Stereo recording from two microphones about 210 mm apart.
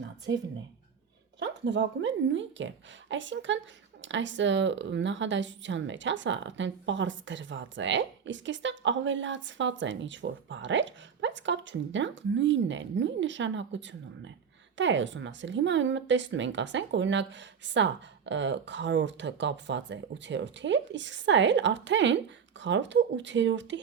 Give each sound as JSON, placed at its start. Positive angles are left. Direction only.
{"t": 1.4, "sound": "speech", "side_deg": -60}